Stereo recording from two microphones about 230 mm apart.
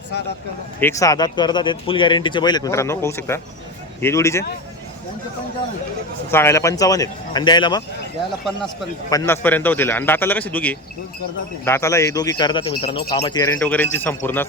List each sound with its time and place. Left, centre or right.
0.8 s speech: centre
6.3 s speech: centre
9.0 s speech: centre
13.6 s speech: centre